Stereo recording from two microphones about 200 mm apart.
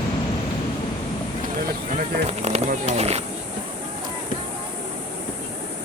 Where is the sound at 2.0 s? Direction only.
35° right (ahead or behind).